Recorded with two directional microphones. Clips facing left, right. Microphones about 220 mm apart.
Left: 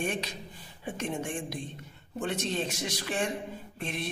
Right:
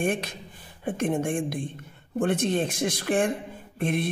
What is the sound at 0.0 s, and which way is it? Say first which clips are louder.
A woman's voice: right 6 dB; 55° right (ahead or behind).